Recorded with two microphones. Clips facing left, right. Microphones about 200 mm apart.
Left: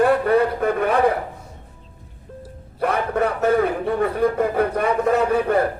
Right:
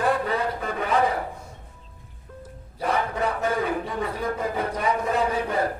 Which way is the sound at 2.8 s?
60° left (ahead or behind).